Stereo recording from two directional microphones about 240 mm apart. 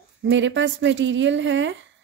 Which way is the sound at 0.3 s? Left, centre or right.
Right.